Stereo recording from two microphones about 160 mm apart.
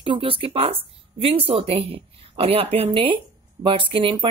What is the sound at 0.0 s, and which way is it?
Speech, 35° right (ahead or behind).